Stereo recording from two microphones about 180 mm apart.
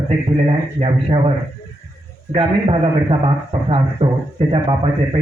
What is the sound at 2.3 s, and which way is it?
A man's voice, 30° right (ahead or behind).